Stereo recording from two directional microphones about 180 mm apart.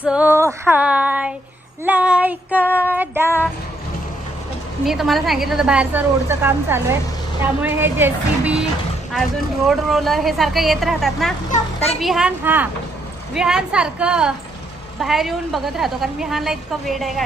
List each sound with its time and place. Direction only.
0.1 s child singing: 10° right (ahead or behind)
4.9 s a woman's voice: centre (ahead or behind)
7.6 s child singing: 10° right (ahead or behind)
9.6 s a woman's voice: centre (ahead or behind)
11.5 s a child's voice: 35° left (ahead or behind)
11.9 s a woman's voice: centre (ahead or behind)